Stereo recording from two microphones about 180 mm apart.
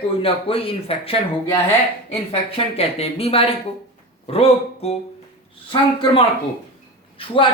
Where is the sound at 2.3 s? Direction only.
35° left (ahead or behind).